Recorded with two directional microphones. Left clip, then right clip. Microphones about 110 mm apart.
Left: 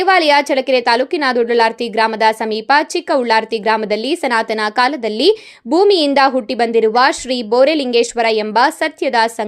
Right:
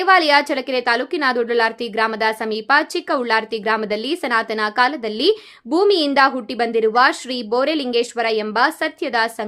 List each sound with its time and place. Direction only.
0.0 s a woman's voice: 30° left (ahead or behind)